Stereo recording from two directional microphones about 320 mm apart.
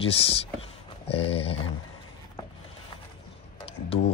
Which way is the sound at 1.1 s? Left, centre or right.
Centre.